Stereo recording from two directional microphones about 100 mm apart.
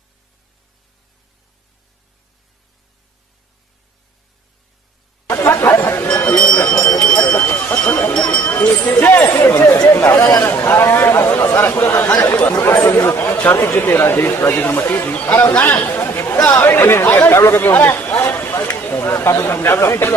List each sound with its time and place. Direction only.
5.2 s chatter: 30° left (ahead or behind)
6.2 s a sound: 10° left (ahead or behind)
8.1 s speech: 10° left (ahead or behind)
10.1 s speech: 35° left (ahead or behind)
10.4 s speech: 25° left (ahead or behind)